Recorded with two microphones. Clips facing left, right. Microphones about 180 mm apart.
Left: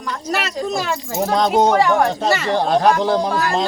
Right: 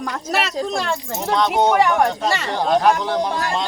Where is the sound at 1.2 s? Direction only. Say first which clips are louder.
Left 3 dB; 40° left (ahead or behind).